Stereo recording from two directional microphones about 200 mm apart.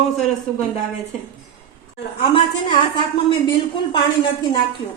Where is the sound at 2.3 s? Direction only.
25° left (ahead or behind).